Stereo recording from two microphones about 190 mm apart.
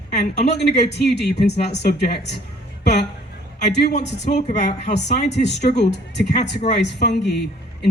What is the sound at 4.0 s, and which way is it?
Speech, 65° left (ahead or behind).